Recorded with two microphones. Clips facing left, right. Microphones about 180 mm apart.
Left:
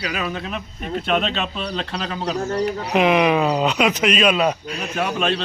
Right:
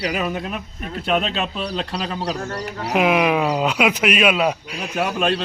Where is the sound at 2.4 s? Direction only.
20° left (ahead or behind).